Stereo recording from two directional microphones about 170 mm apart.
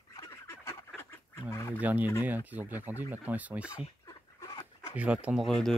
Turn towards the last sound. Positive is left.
turn(degrees=0)  # may be behind; listen again after turning